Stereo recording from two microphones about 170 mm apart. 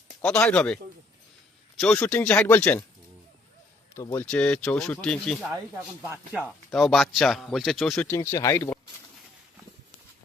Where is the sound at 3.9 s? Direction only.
15° left (ahead or behind).